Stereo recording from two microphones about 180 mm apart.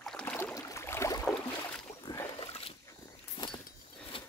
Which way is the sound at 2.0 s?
20° left (ahead or behind).